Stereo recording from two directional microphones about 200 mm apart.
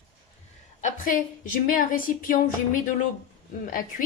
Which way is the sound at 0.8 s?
40° left (ahead or behind).